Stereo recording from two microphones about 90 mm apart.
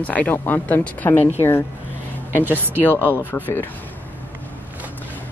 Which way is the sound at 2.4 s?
20° right (ahead or behind).